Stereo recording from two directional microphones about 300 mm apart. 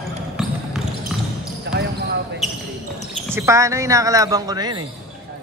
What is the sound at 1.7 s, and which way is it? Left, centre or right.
Basketball bounce, right.